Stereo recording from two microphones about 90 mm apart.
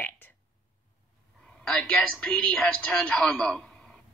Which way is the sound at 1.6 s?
10° left (ahead or behind).